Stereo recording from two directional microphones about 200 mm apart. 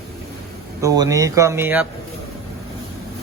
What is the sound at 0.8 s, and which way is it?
Speech, 15° right (ahead or behind).